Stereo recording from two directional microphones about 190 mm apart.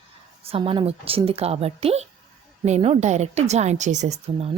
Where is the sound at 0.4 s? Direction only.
30° right (ahead or behind).